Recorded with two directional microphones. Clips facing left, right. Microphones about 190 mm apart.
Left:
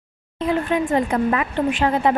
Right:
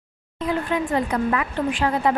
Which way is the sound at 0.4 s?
20° left (ahead or behind).